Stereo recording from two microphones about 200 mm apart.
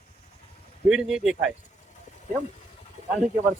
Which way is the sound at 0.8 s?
5° right (ahead or behind).